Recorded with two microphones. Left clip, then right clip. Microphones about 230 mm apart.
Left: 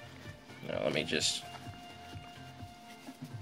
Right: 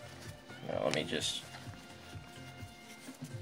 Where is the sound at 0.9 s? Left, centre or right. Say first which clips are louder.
Left 3 dB; centre.